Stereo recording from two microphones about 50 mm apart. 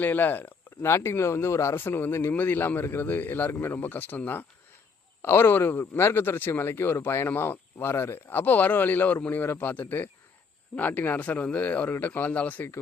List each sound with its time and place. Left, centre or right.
0.0 s a man's voice: left
0.8 s speech: left
1.7 s speech: left
2.3 s a man's voice: left
5.2 s a man's voice: left